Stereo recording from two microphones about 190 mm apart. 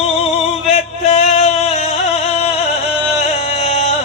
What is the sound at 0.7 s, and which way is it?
Music, 35° left (ahead or behind).